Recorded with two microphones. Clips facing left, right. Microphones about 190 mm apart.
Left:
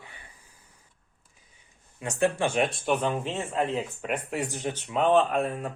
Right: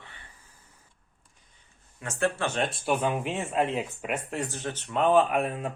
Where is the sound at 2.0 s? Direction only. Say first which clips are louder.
Left 3 dB; 15° left (ahead or behind).